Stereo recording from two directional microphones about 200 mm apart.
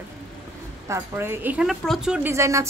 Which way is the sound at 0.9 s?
10° right (ahead or behind).